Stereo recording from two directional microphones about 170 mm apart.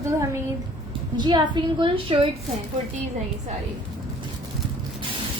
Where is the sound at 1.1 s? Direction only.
25° right (ahead or behind).